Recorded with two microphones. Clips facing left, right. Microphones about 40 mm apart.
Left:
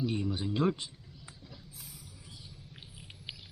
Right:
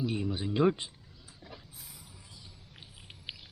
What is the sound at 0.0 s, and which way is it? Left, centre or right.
Speech, centre.